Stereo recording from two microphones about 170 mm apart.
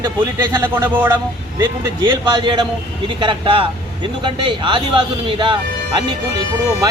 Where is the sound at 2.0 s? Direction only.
25° right (ahead or behind).